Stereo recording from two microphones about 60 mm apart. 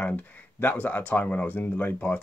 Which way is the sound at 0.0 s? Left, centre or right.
Left.